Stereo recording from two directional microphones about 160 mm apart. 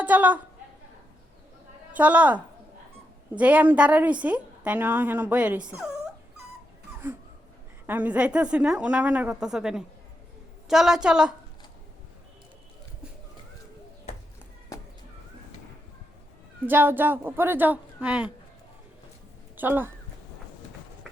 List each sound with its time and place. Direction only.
0.0 s a woman's voice: 10° right (ahead or behind)
1.9 s a woman's voice: 10° right (ahead or behind)
7.9 s a woman's voice: 10° right (ahead or behind)
16.6 s a woman's voice: 10° right (ahead or behind)
19.5 s speech: 10° right (ahead or behind)